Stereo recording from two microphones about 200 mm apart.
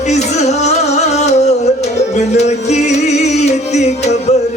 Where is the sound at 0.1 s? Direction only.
35° left (ahead or behind).